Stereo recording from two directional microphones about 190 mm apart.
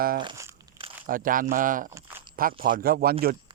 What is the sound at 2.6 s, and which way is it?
Speech, 50° right (ahead or behind).